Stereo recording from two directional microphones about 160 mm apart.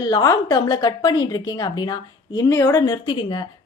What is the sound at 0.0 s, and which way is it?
A woman's voice, 25° left (ahead or behind).